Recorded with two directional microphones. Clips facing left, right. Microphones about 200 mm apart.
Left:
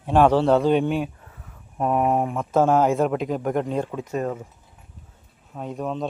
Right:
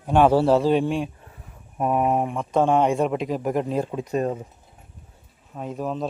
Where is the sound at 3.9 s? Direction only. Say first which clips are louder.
Right 2 dB; 20° right (ahead or behind).